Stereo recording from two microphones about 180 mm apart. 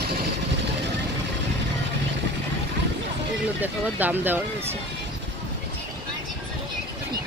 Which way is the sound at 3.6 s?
10° right (ahead or behind).